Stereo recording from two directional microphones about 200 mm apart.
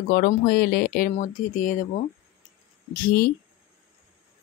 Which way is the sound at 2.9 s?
45° left (ahead or behind).